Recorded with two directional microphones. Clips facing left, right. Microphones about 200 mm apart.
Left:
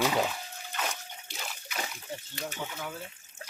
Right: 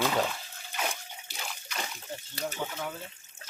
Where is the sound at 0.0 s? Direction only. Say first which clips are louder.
Even; 10° left (ahead or behind).